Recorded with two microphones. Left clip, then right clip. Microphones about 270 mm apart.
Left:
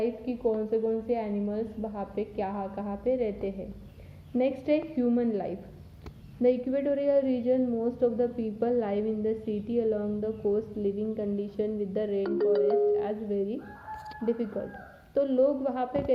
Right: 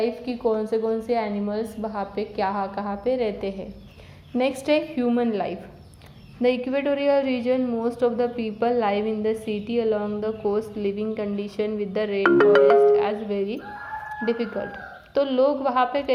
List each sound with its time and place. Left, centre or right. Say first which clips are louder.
0.3 s a woman's voice: right 3 dB; centre
12.2 s speech: right 12 dB; right
13.0 s speech: right 6 dB; centre
15.1 s a woman's voice: right 4 dB; centre